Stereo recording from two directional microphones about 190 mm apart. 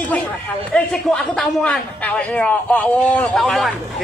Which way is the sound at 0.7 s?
5° left (ahead or behind).